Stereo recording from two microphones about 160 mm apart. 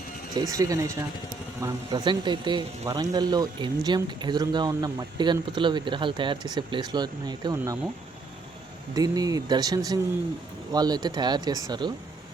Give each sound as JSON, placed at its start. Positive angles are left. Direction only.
{"t": 0.3, "sound": "speech", "side_deg": -20}
{"t": 9.0, "sound": "speech", "side_deg": -25}